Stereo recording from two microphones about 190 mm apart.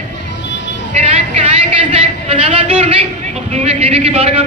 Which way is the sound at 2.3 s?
30° right (ahead or behind).